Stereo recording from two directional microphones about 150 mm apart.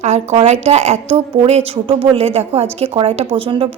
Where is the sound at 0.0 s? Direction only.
50° right (ahead or behind).